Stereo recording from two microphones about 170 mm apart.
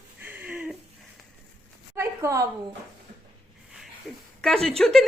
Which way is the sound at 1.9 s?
15° right (ahead or behind).